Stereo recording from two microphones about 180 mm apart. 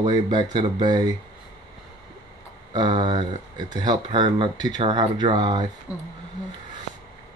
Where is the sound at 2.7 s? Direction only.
25° right (ahead or behind).